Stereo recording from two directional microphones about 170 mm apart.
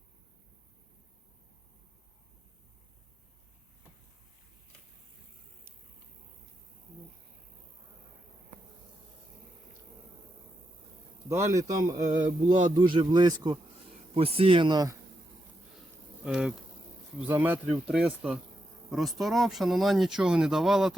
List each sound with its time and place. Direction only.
11.3 s a man's voice: 20° right (ahead or behind)
16.2 s speech: 5° right (ahead or behind)